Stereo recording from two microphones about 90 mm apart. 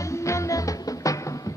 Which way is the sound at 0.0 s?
35° left (ahead or behind).